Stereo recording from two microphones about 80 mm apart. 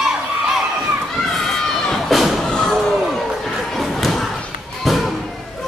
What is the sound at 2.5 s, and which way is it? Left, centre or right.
Slam, centre.